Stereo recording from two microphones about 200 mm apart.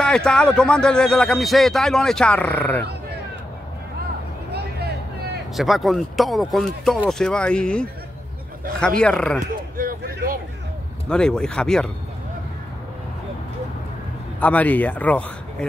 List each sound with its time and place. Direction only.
0.0 s speech: 5° left (ahead or behind)
5.6 s speech: centre (ahead or behind)
9.8 s speech: 45° right (ahead or behind)
11.1 s speech: 5° left (ahead or behind)
14.4 s speech: 10° left (ahead or behind)